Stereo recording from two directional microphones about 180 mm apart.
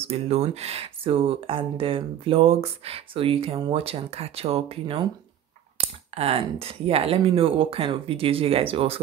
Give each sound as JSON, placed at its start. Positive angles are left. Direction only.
{"t": 0.0, "sound": "speech", "side_deg": -35}